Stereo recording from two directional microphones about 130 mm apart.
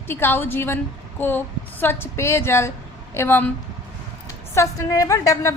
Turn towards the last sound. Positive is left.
turn(degrees=25)  # may be behind; listen again after turning